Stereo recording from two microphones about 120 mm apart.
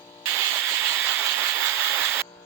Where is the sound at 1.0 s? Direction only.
15° right (ahead or behind).